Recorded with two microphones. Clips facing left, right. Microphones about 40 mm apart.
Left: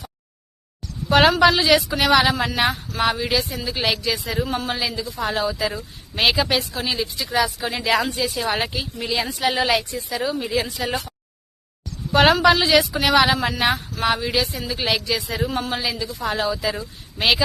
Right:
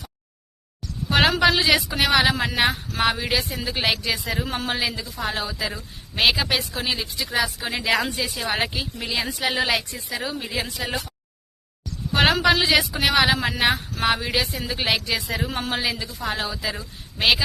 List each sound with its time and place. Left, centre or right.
1.1 s a woman's voice: centre
1.5 s a woman's voice: centre
3.8 s speech: right
5.2 s a woman's voice: centre
12.1 s a woman's voice: centre
13.9 s speech: right
16.4 s a woman's voice: centre